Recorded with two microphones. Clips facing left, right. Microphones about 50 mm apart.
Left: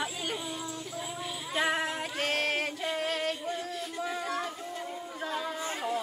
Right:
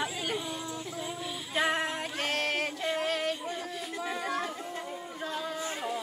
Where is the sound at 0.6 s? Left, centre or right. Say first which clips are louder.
Right 1 dB; centre.